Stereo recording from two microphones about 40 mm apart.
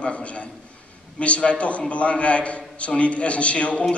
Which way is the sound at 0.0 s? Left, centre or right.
Left.